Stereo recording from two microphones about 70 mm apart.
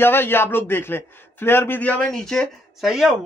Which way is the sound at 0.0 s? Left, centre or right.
Left.